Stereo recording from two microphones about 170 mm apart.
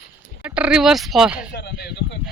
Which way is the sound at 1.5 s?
75° left (ahead or behind).